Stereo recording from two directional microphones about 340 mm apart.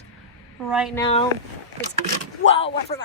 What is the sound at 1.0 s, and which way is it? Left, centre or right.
Speech, centre.